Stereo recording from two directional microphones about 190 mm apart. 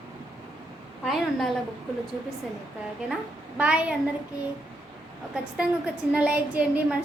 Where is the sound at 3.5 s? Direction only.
5° right (ahead or behind).